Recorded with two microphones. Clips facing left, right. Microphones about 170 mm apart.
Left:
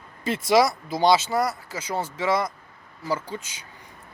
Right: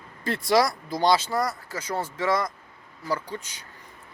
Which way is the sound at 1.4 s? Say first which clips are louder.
Left 2 dB; 5° left (ahead or behind).